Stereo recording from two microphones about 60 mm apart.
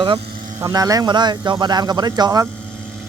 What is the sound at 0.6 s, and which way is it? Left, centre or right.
Speech, right.